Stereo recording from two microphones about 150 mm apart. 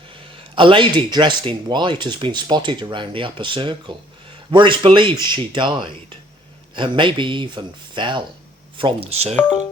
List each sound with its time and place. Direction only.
0.5 s speech: 35° right (ahead or behind)